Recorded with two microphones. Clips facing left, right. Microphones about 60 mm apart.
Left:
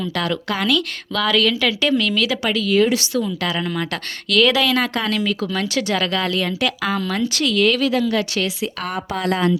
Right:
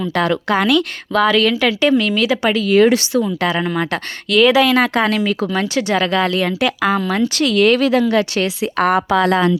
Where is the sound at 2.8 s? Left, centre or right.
Right.